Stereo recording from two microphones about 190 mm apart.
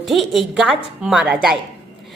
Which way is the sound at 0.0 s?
Centre (ahead or behind).